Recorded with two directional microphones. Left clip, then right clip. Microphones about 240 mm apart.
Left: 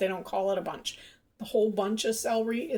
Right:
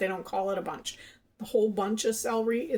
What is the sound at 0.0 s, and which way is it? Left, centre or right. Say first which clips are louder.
Speech: left 1 dB; centre.